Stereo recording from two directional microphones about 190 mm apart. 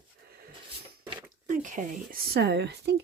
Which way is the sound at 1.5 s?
40° right (ahead or behind).